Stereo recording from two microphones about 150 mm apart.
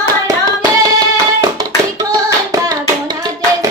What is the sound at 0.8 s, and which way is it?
Music, 25° right (ahead or behind).